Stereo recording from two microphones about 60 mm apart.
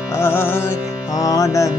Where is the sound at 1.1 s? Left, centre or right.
Left.